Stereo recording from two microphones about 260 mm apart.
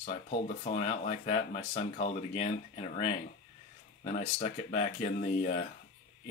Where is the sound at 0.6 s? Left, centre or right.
Left.